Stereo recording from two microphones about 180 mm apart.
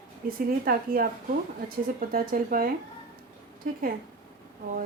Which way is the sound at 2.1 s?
55° right (ahead or behind).